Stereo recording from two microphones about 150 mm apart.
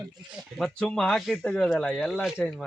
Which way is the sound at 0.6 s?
5° left (ahead or behind).